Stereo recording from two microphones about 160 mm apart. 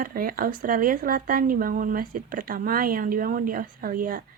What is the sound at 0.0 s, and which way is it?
Speech, 65° right (ahead or behind).